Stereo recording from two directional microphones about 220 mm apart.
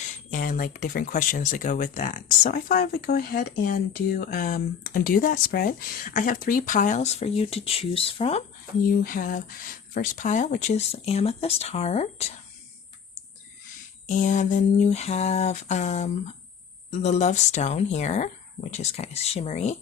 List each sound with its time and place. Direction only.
0.3 s speech: 35° left (ahead or behind)
8.9 s speech: 40° left (ahead or behind)
14.1 s speech: 35° left (ahead or behind)